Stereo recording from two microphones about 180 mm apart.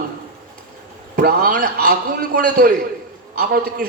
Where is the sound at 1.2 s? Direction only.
55° right (ahead or behind).